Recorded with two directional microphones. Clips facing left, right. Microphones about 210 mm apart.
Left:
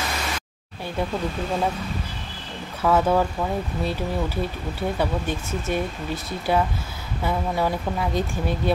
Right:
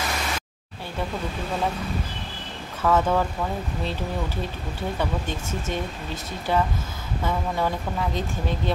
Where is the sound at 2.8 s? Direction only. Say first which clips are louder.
Left 2 dB; 10° left (ahead or behind).